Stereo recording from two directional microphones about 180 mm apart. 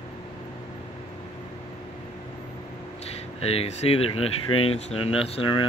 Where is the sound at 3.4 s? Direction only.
35° left (ahead or behind).